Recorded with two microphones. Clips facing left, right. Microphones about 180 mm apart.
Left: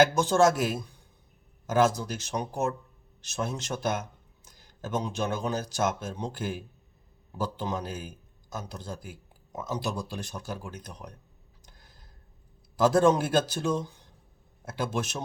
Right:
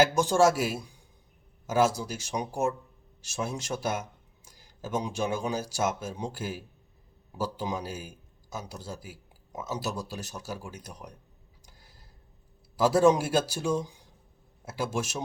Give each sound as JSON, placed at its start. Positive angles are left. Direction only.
{"t": 0.0, "sound": "a man's voice", "side_deg": -10}
{"t": 11.6, "sound": "a sound", "side_deg": -10}
{"t": 12.7, "sound": "a man's voice", "side_deg": -10}